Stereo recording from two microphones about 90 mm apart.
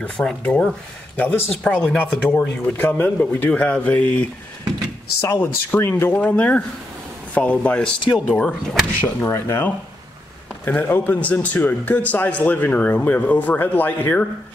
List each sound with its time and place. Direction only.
0.0 s a man's voice: 10° left (ahead or behind)
5.3 s a man's voice: 25° left (ahead or behind); by 8.8 s 10° left (ahead or behind)
9.0 s a man's voice: 30° left (ahead or behind)
10.7 s a man's voice: 20° left (ahead or behind)